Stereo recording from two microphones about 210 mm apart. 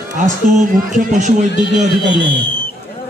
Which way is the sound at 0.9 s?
35° right (ahead or behind).